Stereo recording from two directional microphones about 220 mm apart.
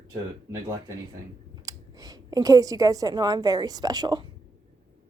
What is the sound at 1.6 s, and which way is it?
A woman's voice, 15° right (ahead or behind).